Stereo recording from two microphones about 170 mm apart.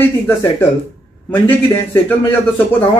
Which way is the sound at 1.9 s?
15° left (ahead or behind).